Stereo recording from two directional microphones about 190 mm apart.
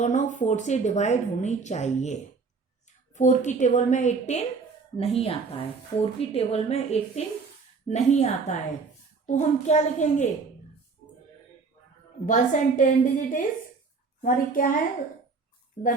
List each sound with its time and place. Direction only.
0.0 s a woman's voice: 40° left (ahead or behind)
3.2 s a woman's voice: 40° left (ahead or behind)
12.2 s a woman's voice: 40° left (ahead or behind)